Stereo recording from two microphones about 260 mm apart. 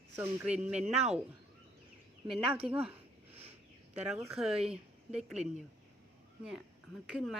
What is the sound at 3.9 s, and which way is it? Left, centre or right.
Speech, centre.